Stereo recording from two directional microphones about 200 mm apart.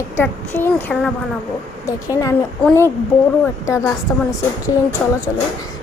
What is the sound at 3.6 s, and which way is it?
Speech, 15° left (ahead or behind).